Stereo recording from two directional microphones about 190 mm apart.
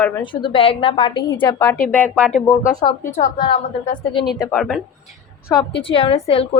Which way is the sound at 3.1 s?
35° left (ahead or behind).